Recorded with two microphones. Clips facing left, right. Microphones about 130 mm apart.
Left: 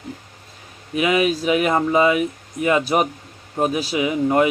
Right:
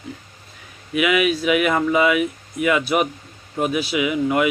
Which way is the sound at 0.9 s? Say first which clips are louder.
Even; 35° left (ahead or behind).